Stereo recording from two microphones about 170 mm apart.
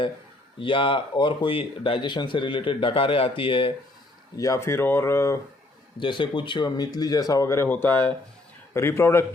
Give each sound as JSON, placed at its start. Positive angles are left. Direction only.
{"t": 0.6, "sound": "speech", "side_deg": 30}
{"t": 4.4, "sound": "speech", "side_deg": 20}
{"t": 6.0, "sound": "speech", "side_deg": 30}